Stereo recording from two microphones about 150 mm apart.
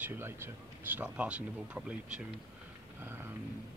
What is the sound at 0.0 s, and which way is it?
Speech, 15° right (ahead or behind).